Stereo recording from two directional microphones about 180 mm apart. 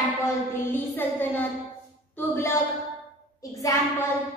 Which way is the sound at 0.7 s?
10° left (ahead or behind).